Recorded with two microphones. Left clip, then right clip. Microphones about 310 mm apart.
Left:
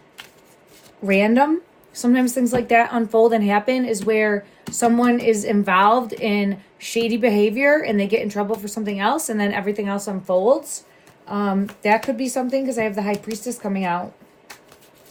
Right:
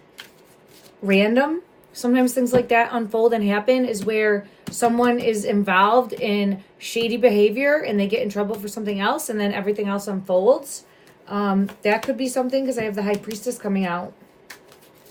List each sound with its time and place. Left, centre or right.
1.0 s speech: centre